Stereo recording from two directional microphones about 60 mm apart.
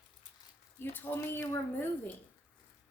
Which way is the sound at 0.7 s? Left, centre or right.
Left.